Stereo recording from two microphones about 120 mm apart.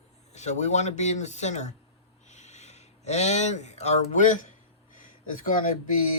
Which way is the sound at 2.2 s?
70° left (ahead or behind).